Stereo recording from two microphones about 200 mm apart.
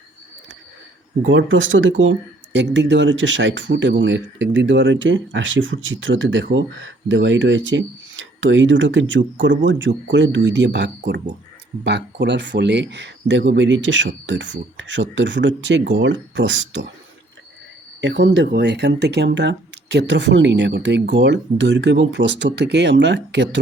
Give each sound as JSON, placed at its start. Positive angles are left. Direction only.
{"t": 1.2, "sound": "speech", "side_deg": -70}
{"t": 18.0, "sound": "speech", "side_deg": -60}